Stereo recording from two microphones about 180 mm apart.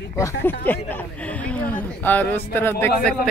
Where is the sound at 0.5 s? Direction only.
10° left (ahead or behind).